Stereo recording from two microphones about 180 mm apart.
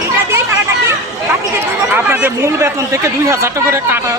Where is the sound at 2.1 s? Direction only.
10° right (ahead or behind).